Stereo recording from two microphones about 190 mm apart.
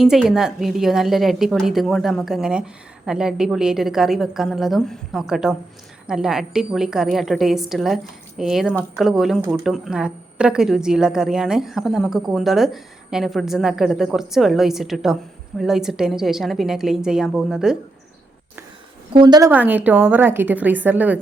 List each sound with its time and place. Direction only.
0.0 s a woman's voice: centre (ahead or behind)
19.1 s a woman's voice: 20° right (ahead or behind)
19.5 s a woman's voice: 10° right (ahead or behind)